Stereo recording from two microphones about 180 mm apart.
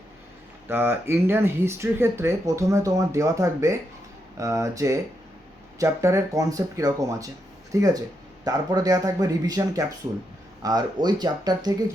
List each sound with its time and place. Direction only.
0.7 s speech: 10° right (ahead or behind)